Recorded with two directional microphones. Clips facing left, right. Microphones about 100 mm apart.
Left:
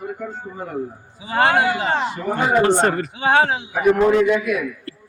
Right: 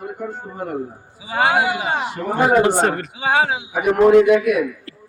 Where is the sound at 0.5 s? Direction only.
60° right (ahead or behind).